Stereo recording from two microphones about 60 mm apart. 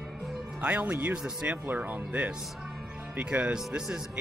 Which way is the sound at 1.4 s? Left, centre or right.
Right.